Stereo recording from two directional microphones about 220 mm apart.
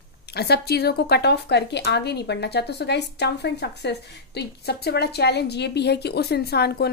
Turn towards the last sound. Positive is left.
turn(degrees=45)  # may be behind; listen again after turning